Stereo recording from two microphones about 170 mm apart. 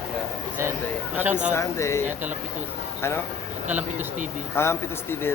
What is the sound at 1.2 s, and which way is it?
Speech, 10° right (ahead or behind).